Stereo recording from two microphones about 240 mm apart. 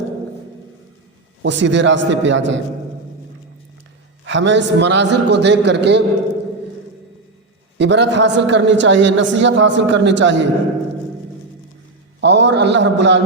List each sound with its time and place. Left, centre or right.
1.4 s a man's voice: right
4.3 s a man's voice: right
7.8 s a man's voice: right
12.2 s a man's voice: right